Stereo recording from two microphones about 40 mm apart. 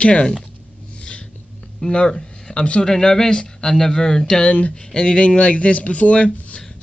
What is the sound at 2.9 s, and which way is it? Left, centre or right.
Speech, centre.